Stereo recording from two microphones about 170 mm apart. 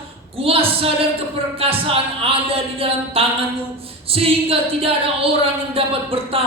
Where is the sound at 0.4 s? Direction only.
35° right (ahead or behind).